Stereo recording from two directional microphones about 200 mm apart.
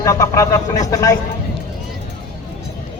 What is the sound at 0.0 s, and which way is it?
Speech, 15° left (ahead or behind).